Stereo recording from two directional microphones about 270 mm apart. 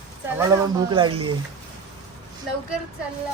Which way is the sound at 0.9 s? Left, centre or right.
Centre.